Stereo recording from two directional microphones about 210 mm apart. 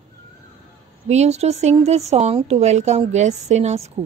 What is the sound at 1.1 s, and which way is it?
Mantra, 30° right (ahead or behind).